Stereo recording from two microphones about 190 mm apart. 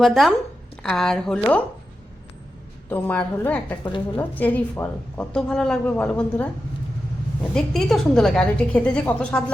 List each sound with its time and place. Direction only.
0.0 s a woman's voice: centre (ahead or behind)
2.9 s a woman's voice: 10° left (ahead or behind)
7.5 s a woman's voice: centre (ahead or behind)